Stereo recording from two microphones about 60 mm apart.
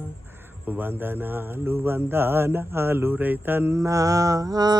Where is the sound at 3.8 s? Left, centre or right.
Right.